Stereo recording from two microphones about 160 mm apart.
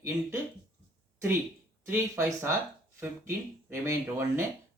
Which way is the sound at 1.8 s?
15° right (ahead or behind).